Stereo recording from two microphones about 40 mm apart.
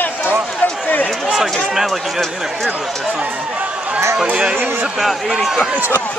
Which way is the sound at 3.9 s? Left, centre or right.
Right.